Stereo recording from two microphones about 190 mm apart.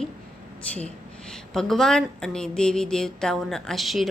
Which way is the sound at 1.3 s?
Centre (ahead or behind).